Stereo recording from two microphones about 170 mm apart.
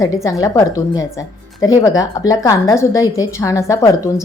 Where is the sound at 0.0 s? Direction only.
20° left (ahead or behind).